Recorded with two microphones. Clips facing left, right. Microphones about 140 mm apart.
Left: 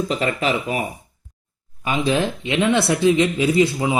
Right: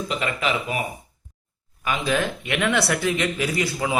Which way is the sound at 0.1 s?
35° left (ahead or behind).